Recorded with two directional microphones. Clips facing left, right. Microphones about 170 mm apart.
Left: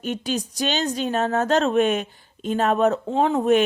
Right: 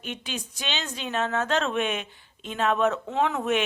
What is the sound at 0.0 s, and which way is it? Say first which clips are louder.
A woman's voice: left 9 dB; 40° left (ahead or behind).